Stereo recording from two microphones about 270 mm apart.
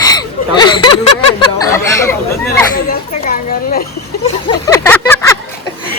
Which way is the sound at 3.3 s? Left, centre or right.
Left.